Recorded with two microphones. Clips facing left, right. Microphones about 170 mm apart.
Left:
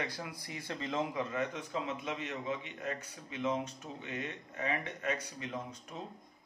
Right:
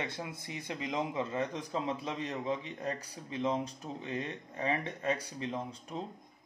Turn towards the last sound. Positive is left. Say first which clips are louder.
# right 3 dB
turn(degrees=-30)  # may be behind; listen again after turning